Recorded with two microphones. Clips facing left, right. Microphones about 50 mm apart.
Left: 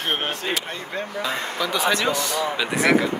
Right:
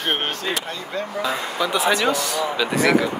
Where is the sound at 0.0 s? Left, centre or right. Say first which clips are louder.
Right 2 dB; right.